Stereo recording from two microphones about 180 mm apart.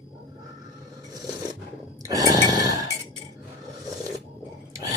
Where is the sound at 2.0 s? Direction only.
20° right (ahead or behind).